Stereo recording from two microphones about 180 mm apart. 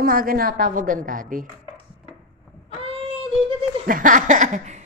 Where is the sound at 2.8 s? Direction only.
30° right (ahead or behind).